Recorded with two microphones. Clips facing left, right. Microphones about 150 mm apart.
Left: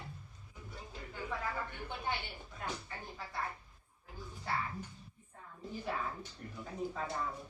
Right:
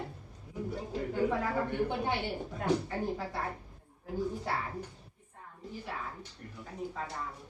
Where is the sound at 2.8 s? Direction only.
70° right (ahead or behind).